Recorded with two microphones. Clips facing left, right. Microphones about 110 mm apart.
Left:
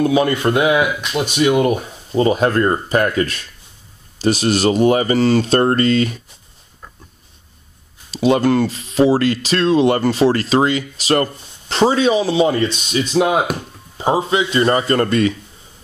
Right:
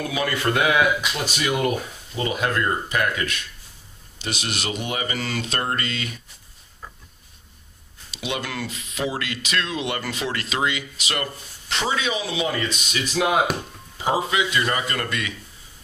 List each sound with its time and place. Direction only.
0.0 s speech: 30° left (ahead or behind)
2.1 s speech: 40° left (ahead or behind)
8.1 s speech: 40° left (ahead or behind)